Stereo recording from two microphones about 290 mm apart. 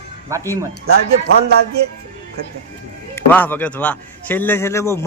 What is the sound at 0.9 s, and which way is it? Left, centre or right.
Speech, right.